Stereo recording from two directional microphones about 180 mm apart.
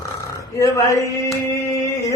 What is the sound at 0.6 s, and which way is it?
Speech, 15° left (ahead or behind).